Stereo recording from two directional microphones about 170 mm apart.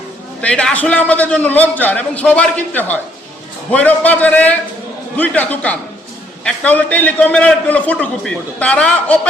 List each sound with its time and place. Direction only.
0.4 s a man's voice: 5° left (ahead or behind)